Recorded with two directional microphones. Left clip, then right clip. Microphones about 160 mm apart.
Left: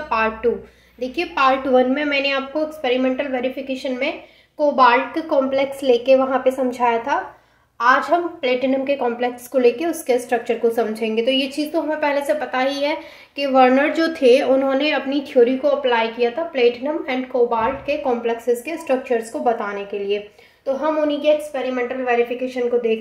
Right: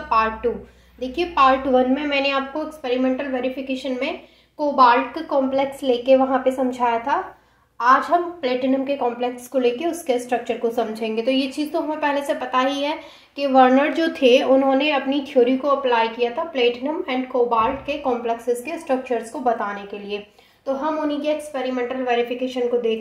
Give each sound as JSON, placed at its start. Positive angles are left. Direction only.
{"t": 0.1, "sound": "a woman's voice", "side_deg": 25}